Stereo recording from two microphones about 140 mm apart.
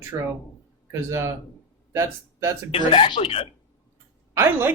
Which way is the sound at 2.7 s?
40° left (ahead or behind).